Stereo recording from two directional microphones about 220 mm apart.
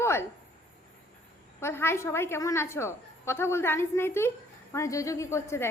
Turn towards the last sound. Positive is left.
turn(degrees=10)  # may be behind; listen again after turning